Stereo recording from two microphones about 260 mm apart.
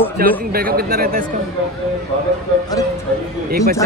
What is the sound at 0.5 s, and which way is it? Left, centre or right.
Speech, right.